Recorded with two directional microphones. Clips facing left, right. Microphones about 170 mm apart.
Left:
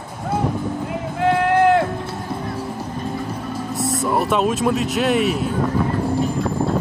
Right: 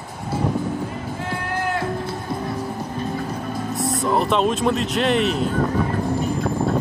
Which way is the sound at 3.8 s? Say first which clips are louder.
Even; centre (ahead or behind).